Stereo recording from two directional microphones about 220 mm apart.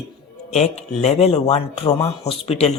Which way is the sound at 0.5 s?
30° left (ahead or behind).